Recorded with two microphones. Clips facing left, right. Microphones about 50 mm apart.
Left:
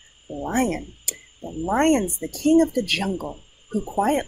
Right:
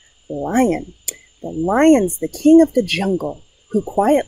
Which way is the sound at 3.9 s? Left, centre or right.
Right.